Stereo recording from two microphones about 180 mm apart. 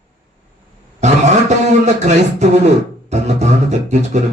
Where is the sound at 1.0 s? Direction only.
40° right (ahead or behind).